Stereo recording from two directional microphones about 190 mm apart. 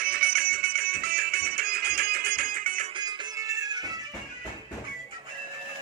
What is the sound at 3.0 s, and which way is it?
Music, 20° right (ahead or behind).